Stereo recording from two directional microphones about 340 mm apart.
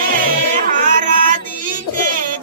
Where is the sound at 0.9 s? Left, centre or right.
Right.